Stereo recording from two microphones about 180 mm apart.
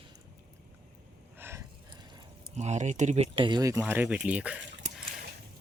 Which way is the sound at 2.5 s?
40° right (ahead or behind).